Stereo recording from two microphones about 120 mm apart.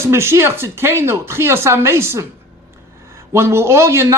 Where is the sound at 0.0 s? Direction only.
20° right (ahead or behind).